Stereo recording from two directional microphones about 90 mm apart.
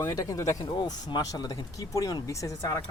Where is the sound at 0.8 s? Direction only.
50° left (ahead or behind).